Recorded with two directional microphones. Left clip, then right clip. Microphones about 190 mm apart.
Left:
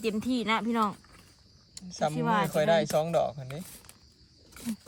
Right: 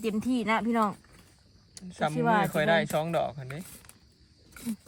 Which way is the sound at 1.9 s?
15° left (ahead or behind).